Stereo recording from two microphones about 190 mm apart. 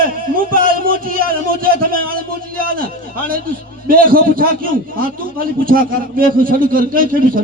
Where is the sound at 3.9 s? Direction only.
50° right (ahead or behind).